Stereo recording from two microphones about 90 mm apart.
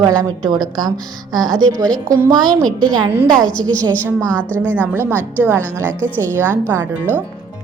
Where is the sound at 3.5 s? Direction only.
10° left (ahead or behind).